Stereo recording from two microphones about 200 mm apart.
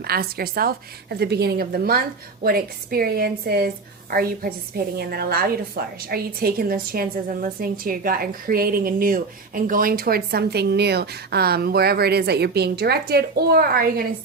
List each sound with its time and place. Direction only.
0.0 s a woman's voice: 50° right (ahead or behind)